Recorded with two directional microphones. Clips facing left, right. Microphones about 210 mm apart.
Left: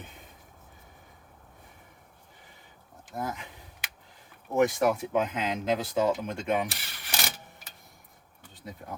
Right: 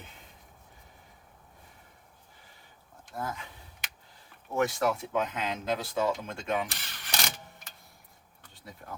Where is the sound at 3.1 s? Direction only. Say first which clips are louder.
Left 2 dB; 20° left (ahead or behind).